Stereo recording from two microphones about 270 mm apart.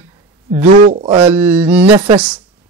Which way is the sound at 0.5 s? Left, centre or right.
Right.